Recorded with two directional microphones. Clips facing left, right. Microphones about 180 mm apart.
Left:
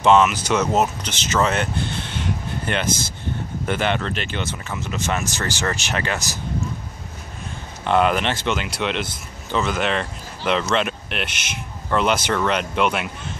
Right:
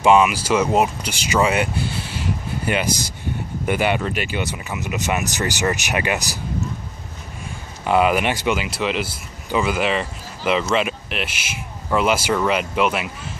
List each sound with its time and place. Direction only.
0.0 s speech: 10° right (ahead or behind)
7.8 s speech: 5° right (ahead or behind)